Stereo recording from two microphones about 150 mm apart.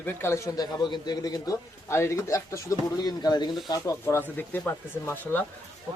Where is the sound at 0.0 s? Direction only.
15° left (ahead or behind).